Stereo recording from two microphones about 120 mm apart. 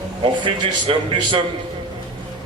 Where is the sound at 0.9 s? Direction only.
50° right (ahead or behind).